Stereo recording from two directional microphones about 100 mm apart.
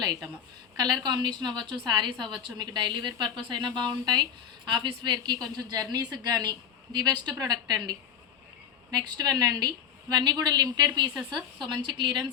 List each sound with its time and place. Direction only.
0.8 s a woman's voice: 45° right (ahead or behind)